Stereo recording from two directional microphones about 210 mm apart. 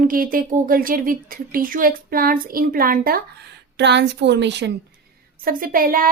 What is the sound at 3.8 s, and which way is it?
Speech, 55° right (ahead or behind).